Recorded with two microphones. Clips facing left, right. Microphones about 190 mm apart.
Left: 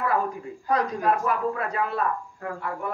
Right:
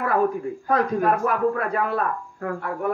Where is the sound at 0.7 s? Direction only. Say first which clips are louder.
Right 3 dB; 55° right (ahead or behind).